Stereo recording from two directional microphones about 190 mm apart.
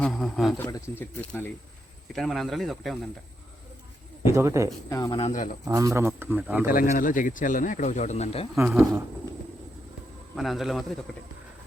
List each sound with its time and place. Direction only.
0.0 s speech: centre (ahead or behind)
4.3 s speech: 15° right (ahead or behind)
4.9 s speech: 20° left (ahead or behind)
5.2 s speech: 40° left (ahead or behind)
5.6 s speech: 20° right (ahead or behind)
6.9 s speech: 45° left (ahead or behind)
8.5 s speech: 5° right (ahead or behind)
10.3 s speech: centre (ahead or behind)